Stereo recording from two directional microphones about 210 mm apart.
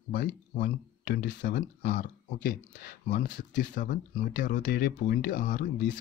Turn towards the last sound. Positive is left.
turn(degrees=40)  # may be behind; listen again after turning